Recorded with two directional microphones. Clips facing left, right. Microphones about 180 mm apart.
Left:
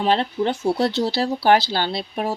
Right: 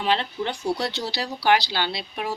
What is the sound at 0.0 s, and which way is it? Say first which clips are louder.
Speech: left 5 dB; 40° left (ahead or behind).